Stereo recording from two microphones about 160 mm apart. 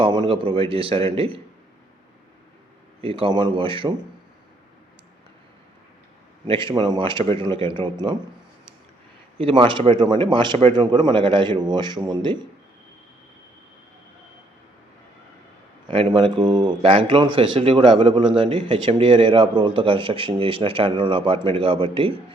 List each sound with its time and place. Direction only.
0.0 s speech: 30° right (ahead or behind)
3.0 s speech: 35° right (ahead or behind)
6.5 s speech: 30° right (ahead or behind)
9.4 s a man's voice: 35° right (ahead or behind)
15.9 s speech: 30° right (ahead or behind)